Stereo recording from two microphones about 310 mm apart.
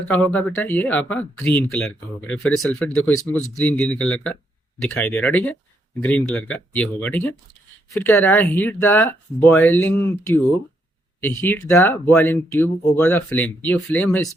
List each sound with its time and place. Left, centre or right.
0.1 s speech: centre